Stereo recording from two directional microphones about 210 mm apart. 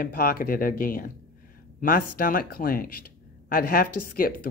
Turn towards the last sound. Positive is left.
turn(degrees=45)  # may be behind; listen again after turning